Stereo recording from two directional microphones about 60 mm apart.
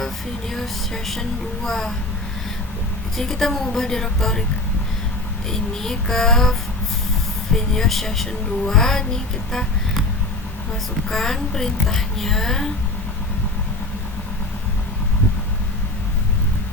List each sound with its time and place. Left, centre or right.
0.5 s speech: centre
3.2 s speech: centre
5.5 s speech: centre
11.1 s speech: centre